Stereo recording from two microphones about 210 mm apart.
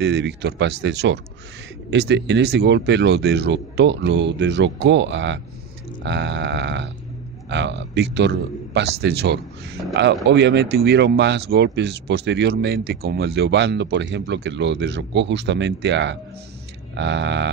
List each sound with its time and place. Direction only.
0.0 s speech: 55° right (ahead or behind)